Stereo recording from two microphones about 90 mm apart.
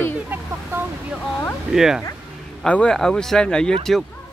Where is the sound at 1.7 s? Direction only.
5° right (ahead or behind).